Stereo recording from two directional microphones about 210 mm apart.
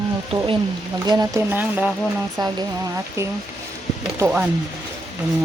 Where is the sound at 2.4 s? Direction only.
20° right (ahead or behind).